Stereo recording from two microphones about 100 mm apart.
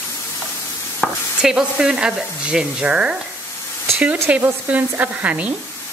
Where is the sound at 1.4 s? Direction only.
5° right (ahead or behind).